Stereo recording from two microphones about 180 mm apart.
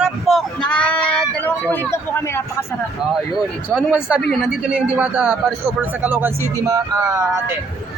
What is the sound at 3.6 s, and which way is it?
Speech, 5° left (ahead or behind).